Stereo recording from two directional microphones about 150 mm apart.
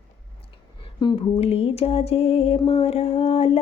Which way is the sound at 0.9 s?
35° left (ahead or behind).